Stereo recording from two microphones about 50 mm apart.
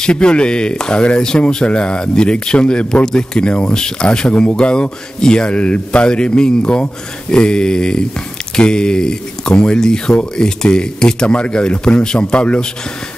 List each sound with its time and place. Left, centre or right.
0.0 s speech: centre